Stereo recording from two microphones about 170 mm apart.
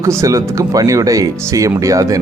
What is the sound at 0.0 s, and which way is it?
Speech, 15° right (ahead or behind).